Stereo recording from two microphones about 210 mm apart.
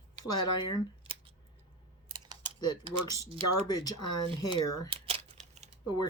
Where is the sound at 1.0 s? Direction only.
25° right (ahead or behind).